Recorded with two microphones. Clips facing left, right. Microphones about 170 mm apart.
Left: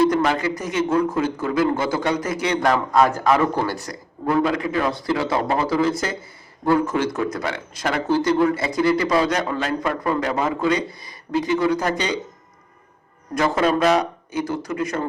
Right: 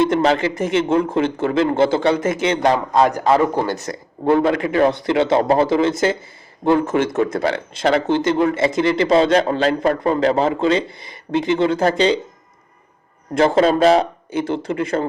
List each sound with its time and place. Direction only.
0.0 s speech: 25° right (ahead or behind)
7.4 s a man's voice: 30° right (ahead or behind)
13.3 s speech: 30° right (ahead or behind)